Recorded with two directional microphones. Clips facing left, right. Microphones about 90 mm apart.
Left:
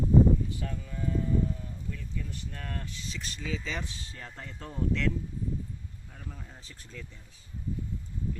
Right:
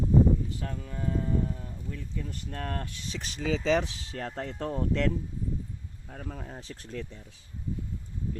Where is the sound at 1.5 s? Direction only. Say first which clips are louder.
Right 1 dB; 35° right (ahead or behind).